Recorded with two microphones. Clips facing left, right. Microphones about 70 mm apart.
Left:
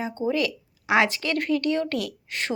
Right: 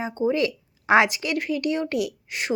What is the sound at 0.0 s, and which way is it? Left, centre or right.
Speech, right.